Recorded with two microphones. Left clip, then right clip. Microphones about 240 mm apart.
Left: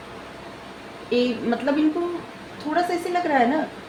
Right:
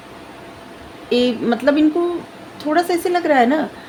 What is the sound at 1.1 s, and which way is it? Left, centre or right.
Speech, right.